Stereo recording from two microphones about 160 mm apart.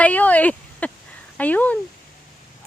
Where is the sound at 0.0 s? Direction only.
10° left (ahead or behind).